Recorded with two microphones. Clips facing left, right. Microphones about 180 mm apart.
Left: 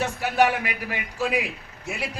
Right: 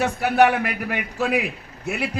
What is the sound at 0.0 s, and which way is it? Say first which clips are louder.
A man's voice: right 4 dB; 60° right (ahead or behind).